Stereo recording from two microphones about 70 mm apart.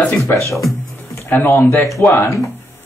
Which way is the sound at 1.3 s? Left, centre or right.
Left.